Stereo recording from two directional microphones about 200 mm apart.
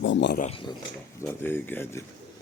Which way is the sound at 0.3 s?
35° left (ahead or behind).